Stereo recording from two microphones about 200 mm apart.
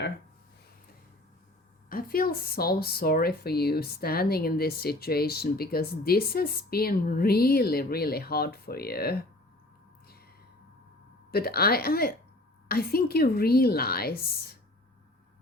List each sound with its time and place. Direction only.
1.9 s speech: 45° left (ahead or behind)
11.3 s speech: 50° left (ahead or behind)